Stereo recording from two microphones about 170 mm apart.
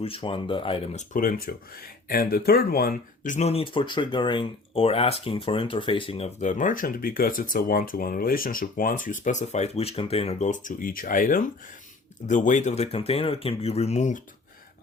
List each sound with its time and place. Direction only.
0.0 s speech: 30° left (ahead or behind)
0.9 s speech: 50° left (ahead or behind)